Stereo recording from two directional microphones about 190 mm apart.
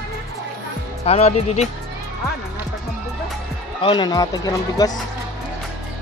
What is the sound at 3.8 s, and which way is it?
Speech, 25° left (ahead or behind).